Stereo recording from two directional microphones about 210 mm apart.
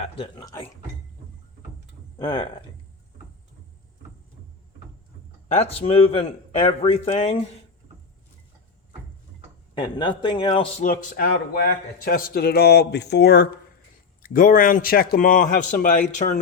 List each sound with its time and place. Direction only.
0.3 s speech: 15° left (ahead or behind)
2.1 s speech: 20° left (ahead or behind)
5.8 s speech: 30° left (ahead or behind)
9.7 s speech: 20° left (ahead or behind)
10.8 s a man's voice: 45° left (ahead or behind)